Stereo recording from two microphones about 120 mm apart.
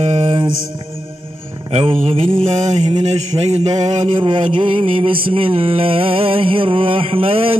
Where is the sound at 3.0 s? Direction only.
65° right (ahead or behind).